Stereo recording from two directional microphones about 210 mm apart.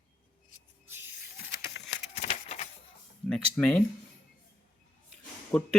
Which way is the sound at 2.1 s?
30° left (ahead or behind).